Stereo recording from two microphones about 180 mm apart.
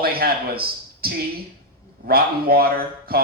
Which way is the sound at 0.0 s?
55° right (ahead or behind).